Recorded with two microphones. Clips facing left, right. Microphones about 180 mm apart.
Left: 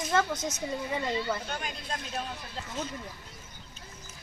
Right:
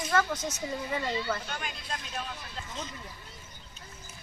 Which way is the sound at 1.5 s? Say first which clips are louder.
Left 2 dB; 40° left (ahead or behind).